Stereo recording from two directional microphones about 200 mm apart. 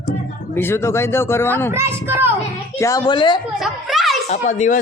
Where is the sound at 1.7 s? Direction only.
10° right (ahead or behind).